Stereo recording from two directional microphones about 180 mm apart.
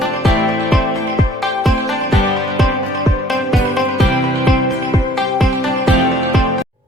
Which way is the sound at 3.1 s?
Centre (ahead or behind).